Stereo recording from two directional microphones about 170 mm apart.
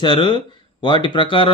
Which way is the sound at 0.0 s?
25° left (ahead or behind).